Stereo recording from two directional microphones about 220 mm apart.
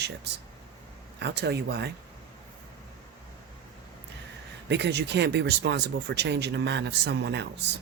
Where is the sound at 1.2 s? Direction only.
50° right (ahead or behind).